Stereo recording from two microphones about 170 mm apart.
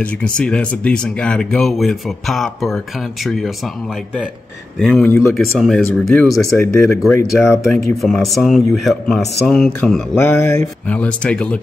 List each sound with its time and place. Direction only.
0.0 s speech: 5° left (ahead or behind)
6.4 s speech: 15° left (ahead or behind)
7.6 s speech: centre (ahead or behind)
10.1 s speech: 15° left (ahead or behind)